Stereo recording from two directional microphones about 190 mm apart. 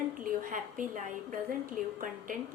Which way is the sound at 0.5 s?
45° right (ahead or behind).